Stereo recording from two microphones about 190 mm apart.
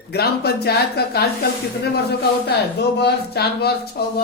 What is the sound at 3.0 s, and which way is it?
Speech, 60° left (ahead or behind).